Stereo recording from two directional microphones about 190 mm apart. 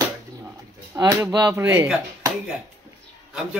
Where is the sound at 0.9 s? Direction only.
15° right (ahead or behind).